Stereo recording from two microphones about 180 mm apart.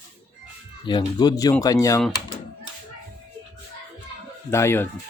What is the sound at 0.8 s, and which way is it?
Speech, 25° left (ahead or behind).